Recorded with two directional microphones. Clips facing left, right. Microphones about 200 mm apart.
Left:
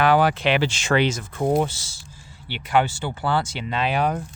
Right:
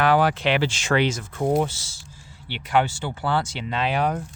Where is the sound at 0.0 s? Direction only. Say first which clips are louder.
Left 1 dB; 15° left (ahead or behind).